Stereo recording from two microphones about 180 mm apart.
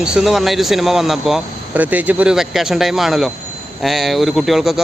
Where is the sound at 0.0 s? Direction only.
5° right (ahead or behind).